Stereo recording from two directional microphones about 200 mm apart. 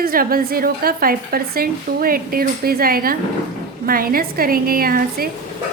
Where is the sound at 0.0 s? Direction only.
45° right (ahead or behind).